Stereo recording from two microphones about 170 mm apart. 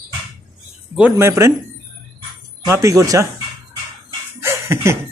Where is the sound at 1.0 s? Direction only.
10° right (ahead or behind).